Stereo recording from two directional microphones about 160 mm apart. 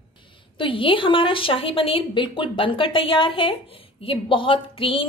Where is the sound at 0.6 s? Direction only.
35° left (ahead or behind).